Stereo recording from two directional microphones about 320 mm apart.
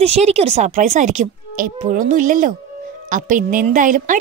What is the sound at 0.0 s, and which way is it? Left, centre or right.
Speech, centre.